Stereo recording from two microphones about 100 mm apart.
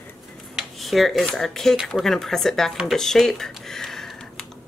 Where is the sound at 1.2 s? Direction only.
5° left (ahead or behind).